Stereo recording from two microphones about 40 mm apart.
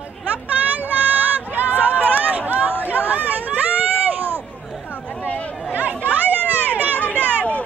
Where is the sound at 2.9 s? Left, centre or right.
Right.